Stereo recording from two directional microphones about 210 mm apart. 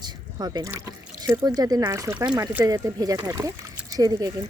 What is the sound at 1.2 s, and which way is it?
Speech, 20° right (ahead or behind).